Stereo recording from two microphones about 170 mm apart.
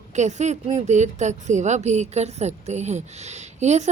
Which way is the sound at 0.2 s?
45° right (ahead or behind).